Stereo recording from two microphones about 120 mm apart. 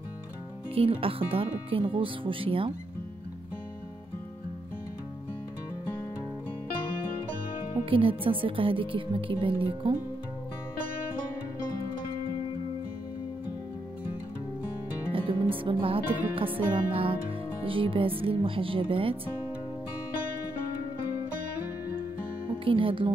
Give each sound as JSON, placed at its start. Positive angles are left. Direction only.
{"t": 0.7, "sound": "speech", "side_deg": -50}
{"t": 7.8, "sound": "speech", "side_deg": -50}
{"t": 15.1, "sound": "music", "side_deg": -45}
{"t": 16.3, "sound": "speech", "side_deg": -50}
{"t": 22.5, "sound": "speech", "side_deg": -45}